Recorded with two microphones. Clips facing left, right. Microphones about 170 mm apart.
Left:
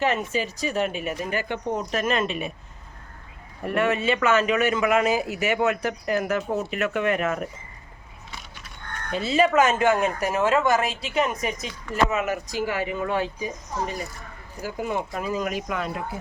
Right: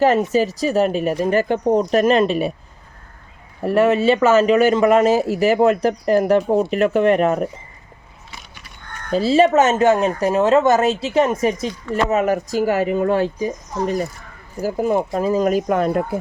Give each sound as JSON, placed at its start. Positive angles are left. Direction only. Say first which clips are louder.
{"t": 0.0, "sound": "speech", "louder": "right 9 dB", "side_deg": -40}
{"t": 3.6, "sound": "speech", "louder": "right 8 dB", "side_deg": -35}
{"t": 9.1, "sound": "speech", "louder": "right 6 dB", "side_deg": -35}